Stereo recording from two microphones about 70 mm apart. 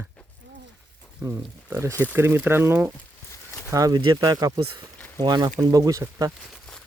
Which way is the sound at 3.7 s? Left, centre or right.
Right.